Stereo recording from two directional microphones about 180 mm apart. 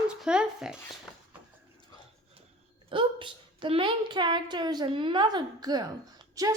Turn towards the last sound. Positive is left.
turn(degrees=-20)  # may be behind; listen again after turning